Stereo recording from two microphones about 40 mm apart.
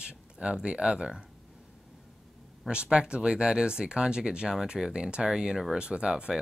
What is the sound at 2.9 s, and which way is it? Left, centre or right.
Speech, right.